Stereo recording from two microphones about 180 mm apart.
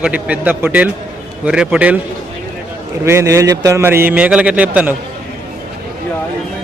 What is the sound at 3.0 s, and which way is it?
Speech, 15° right (ahead or behind).